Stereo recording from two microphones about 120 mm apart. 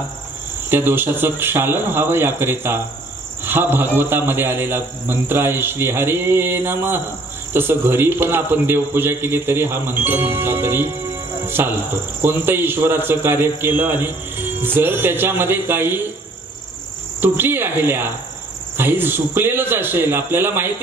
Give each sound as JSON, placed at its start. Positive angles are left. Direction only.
{"t": 0.7, "sound": "a man's voice", "side_deg": -20}
{"t": 11.4, "sound": "cricket", "side_deg": -20}
{"t": 12.2, "sound": "a man's voice", "side_deg": -20}
{"t": 17.2, "sound": "a man's voice", "side_deg": -20}